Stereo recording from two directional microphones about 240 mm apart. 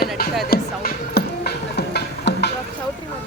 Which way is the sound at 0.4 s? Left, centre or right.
Left.